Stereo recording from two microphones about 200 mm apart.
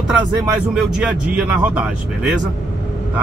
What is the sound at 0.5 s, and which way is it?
Speech, 5° right (ahead or behind).